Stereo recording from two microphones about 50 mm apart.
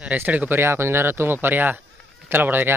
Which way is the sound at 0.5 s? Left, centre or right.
Right.